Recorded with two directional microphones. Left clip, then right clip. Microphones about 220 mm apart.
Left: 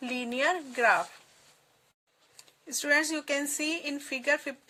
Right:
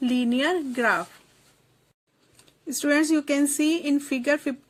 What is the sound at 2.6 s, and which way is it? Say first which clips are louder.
A woman's voice: right 4 dB; 15° right (ahead or behind).